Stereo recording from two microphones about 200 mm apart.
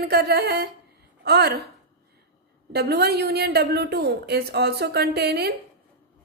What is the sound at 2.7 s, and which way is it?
A woman's voice, 55° right (ahead or behind).